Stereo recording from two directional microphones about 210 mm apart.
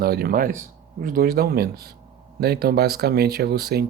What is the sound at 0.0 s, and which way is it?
Speech, 50° right (ahead or behind).